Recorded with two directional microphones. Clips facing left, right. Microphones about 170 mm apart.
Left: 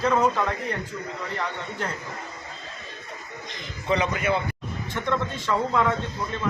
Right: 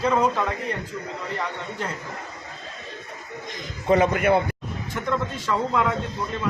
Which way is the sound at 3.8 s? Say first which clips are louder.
Right 5 dB; 50° right (ahead or behind).